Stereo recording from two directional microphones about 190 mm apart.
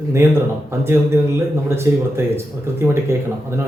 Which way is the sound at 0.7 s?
15° right (ahead or behind).